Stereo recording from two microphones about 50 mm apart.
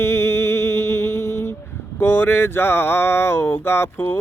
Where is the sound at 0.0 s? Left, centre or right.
Left.